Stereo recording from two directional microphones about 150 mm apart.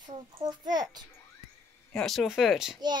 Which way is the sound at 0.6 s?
25° right (ahead or behind).